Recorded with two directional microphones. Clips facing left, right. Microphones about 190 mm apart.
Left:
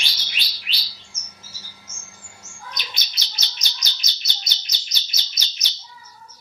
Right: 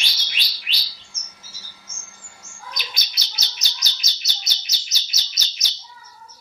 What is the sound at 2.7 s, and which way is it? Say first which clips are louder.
Chirp: right 1 dB; 10° right (ahead or behind).